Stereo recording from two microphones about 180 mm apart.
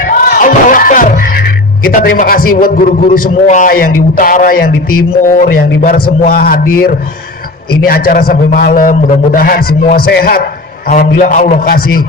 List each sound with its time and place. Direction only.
0.1 s music: 50° left (ahead or behind)
1.8 s a man's voice: 55° left (ahead or behind)